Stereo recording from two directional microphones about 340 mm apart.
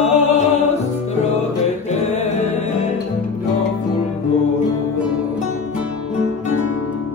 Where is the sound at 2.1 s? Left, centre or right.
Centre.